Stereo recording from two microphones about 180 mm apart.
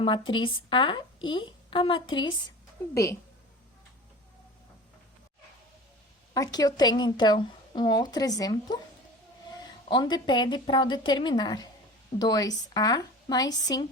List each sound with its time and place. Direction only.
0.0 s a woman's voice: 25° left (ahead or behind)
6.3 s a woman's voice: 20° left (ahead or behind)
9.9 s a woman's voice: 25° left (ahead or behind)